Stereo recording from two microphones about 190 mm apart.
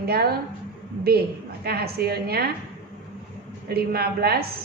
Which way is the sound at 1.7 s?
55° right (ahead or behind).